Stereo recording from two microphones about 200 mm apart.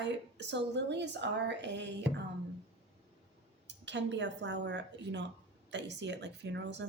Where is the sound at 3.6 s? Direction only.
60° right (ahead or behind).